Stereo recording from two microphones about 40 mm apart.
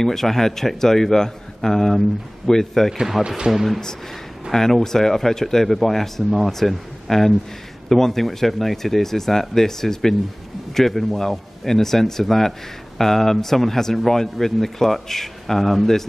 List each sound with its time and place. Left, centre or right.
0.0 s a man's voice: centre
3.0 s speech: centre
3.3 s speech: centre
3.5 s speech: centre
4.5 s a man's voice: centre